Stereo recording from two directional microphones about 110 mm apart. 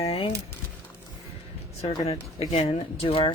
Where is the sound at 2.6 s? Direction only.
55° left (ahead or behind).